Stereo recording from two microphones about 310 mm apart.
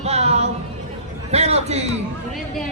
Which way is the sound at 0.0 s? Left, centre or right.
Right.